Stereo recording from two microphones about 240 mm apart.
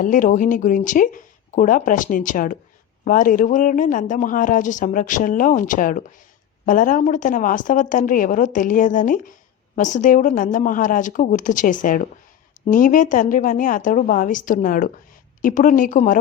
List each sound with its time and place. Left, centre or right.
0.0 s speech: left